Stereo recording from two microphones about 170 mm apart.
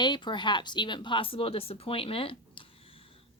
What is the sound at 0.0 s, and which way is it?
Speech, 25° left (ahead or behind).